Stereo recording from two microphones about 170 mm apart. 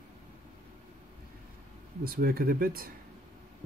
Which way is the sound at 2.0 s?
60° right (ahead or behind).